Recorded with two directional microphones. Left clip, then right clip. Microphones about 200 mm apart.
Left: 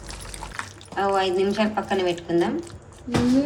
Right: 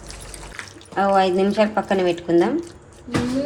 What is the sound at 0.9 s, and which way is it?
Speech, 20° right (ahead or behind).